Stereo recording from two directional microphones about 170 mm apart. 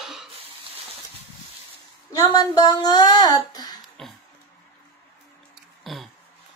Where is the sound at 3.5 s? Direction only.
25° left (ahead or behind).